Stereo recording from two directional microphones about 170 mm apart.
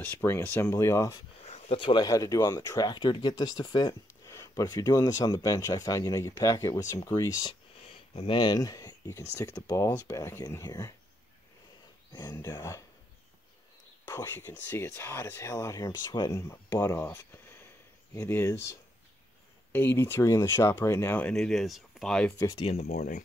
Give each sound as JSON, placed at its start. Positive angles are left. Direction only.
{"t": 0.0, "sound": "speech", "side_deg": 10}
{"t": 1.4, "sound": "speech", "side_deg": 40}
{"t": 12.1, "sound": "speech", "side_deg": 25}
{"t": 14.1, "sound": "speech", "side_deg": 15}
{"t": 22.6, "sound": "speech", "side_deg": 35}
{"t": 22.8, "sound": "speech", "side_deg": 65}